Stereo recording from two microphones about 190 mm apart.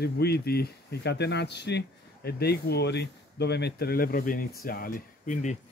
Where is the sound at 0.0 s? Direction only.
60° left (ahead or behind); by 5.6 s 40° left (ahead or behind).